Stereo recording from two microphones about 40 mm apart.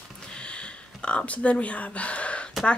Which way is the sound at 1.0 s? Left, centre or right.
Left.